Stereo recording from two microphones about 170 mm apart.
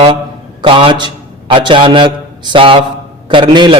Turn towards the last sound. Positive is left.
turn(degrees=-30)  # may be behind; listen again after turning